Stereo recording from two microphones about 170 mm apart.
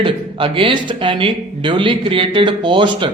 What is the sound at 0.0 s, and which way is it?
A man's voice, 30° right (ahead or behind).